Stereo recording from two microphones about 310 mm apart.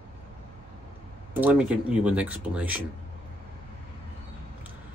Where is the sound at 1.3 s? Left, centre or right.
Centre.